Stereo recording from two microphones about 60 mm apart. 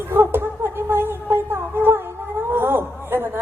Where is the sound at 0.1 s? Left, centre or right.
Right.